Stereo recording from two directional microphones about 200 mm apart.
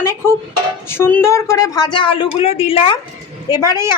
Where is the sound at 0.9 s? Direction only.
10° left (ahead or behind).